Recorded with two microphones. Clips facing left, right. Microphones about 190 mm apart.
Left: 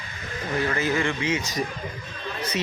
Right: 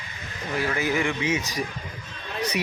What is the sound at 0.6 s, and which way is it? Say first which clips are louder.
Speech: even; 10° right (ahead or behind).